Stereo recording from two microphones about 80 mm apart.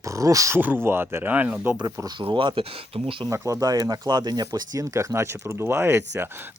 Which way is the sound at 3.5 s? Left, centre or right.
Right.